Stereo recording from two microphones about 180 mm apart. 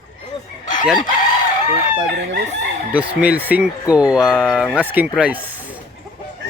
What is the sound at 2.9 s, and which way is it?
Speech, 5° right (ahead or behind).